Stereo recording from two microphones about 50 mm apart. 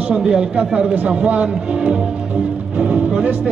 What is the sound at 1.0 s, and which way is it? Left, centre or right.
Music, right.